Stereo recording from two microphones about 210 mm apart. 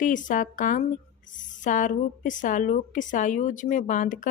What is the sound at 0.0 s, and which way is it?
Speech, 40° left (ahead or behind).